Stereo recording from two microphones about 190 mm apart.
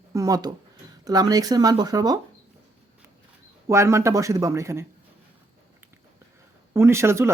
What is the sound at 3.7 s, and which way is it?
Speech, 15° right (ahead or behind).